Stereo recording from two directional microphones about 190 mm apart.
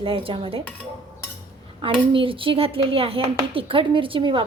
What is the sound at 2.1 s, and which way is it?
A woman's voice, 30° right (ahead or behind).